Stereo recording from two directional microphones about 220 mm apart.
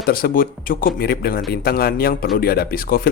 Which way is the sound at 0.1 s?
40° left (ahead or behind).